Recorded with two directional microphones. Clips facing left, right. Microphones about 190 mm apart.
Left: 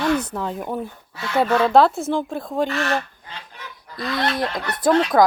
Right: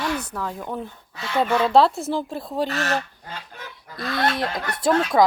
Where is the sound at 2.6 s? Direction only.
40° right (ahead or behind).